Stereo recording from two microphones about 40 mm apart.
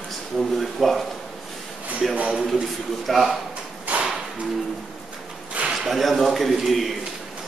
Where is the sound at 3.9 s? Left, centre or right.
Right.